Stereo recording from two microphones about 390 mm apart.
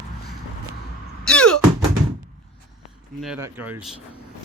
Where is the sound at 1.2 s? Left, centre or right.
Centre.